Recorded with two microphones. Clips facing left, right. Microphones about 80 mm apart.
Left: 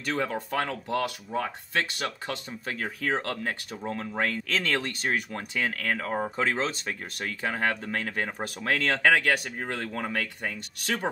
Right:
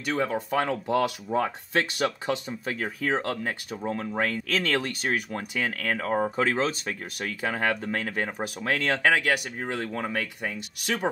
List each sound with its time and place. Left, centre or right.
0.0 s speech: centre
0.8 s speech: right; by 11.1 s centre